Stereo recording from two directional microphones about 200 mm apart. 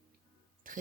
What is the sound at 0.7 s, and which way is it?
Speech, 45° right (ahead or behind).